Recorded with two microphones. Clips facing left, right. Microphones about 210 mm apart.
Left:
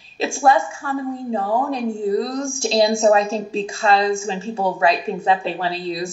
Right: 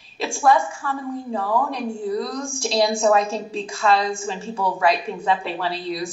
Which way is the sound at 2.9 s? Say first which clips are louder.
Left 3 dB; 40° left (ahead or behind).